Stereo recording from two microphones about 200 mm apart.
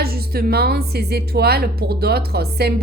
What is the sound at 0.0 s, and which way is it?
Speech, 50° right (ahead or behind).